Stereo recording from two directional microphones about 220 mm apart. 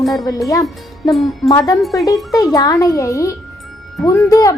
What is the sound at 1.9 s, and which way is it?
Speech, 15° left (ahead or behind).